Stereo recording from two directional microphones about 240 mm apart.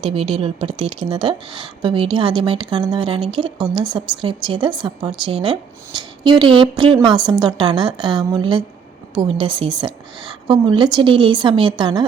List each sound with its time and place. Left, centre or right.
0.0 s a woman's voice: right